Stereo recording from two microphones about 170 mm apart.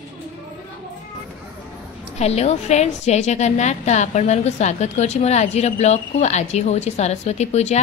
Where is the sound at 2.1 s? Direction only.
40° left (ahead or behind).